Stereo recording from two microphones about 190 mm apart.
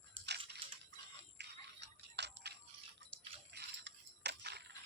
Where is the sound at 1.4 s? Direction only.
65° right (ahead or behind).